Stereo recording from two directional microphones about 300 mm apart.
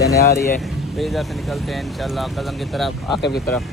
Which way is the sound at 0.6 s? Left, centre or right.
Centre.